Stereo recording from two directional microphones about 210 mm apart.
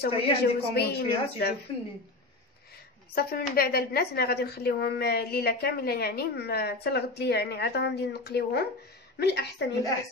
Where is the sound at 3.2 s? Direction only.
45° left (ahead or behind).